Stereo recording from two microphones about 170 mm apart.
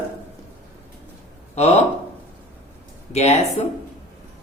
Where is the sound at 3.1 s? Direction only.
40° left (ahead or behind).